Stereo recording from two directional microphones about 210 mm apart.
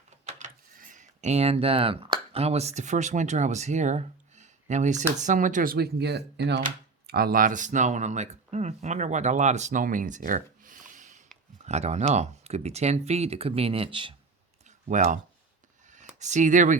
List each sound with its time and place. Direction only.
0.3 s speech: 35° right (ahead or behind)
14.8 s speech: 35° right (ahead or behind)
15.9 s a sound: 35° right (ahead or behind)